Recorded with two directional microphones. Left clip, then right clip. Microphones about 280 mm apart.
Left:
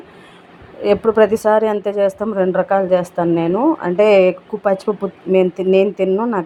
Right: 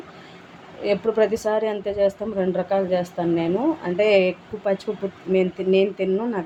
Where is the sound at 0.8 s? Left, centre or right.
Left.